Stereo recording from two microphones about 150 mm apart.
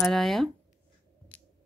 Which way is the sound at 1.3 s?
10° left (ahead or behind).